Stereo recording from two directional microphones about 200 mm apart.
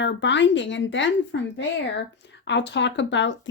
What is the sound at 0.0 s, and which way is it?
Speech, 65° left (ahead or behind).